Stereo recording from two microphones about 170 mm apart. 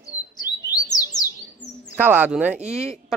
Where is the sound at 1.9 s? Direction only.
10° right (ahead or behind).